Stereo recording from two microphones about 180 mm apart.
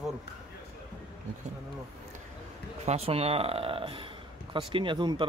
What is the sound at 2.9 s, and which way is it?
Speech, 35° right (ahead or behind).